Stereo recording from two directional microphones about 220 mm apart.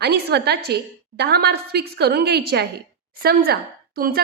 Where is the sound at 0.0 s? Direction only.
45° right (ahead or behind).